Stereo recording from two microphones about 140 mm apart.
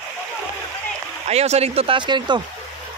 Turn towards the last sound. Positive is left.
turn(degrees=-35)  # may be behind; listen again after turning